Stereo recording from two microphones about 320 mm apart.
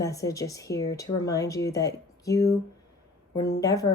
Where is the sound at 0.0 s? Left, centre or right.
Centre.